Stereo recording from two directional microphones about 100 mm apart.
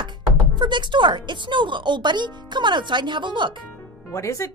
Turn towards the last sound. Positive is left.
turn(degrees=30)  # may be behind; listen again after turning